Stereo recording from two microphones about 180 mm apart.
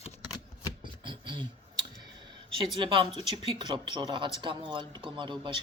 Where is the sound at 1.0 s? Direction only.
25° right (ahead or behind).